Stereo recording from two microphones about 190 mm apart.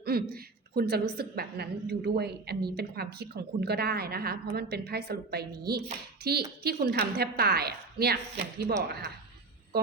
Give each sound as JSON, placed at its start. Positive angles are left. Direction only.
{"t": 0.0, "sound": "a woman's voice", "side_deg": -55}